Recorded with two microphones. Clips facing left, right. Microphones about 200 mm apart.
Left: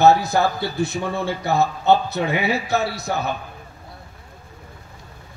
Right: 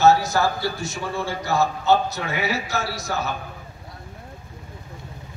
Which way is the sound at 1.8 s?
60° left (ahead or behind).